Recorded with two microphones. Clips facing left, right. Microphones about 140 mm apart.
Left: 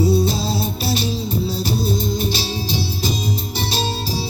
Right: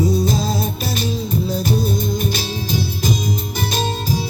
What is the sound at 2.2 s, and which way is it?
Music, 50° right (ahead or behind).